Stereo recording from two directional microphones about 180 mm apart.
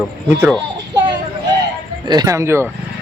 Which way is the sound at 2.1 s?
20° right (ahead or behind).